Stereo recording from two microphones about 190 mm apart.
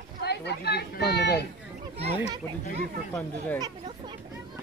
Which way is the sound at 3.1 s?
10° left (ahead or behind).